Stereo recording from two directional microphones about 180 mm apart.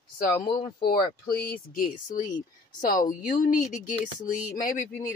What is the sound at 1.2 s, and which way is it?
Speech, 55° left (ahead or behind).